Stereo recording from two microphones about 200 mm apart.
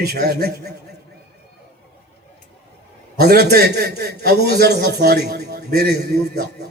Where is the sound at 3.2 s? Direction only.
50° right (ahead or behind).